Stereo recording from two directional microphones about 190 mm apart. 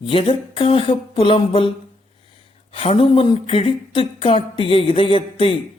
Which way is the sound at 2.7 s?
30° left (ahead or behind).